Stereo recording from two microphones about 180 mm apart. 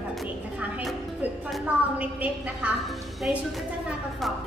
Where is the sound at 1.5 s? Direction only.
5° right (ahead or behind).